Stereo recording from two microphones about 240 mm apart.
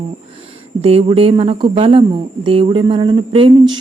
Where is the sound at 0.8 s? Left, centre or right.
Right.